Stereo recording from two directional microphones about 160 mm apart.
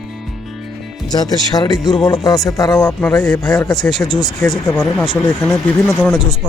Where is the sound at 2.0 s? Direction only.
20° left (ahead or behind).